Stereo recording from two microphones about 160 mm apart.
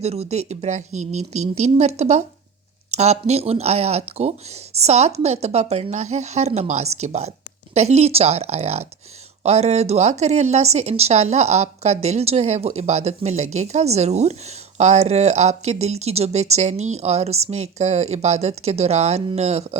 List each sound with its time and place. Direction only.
0.0 s speech: 40° right (ahead or behind)